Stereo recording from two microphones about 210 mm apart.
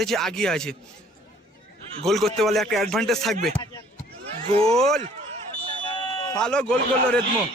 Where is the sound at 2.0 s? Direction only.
Centre (ahead or behind).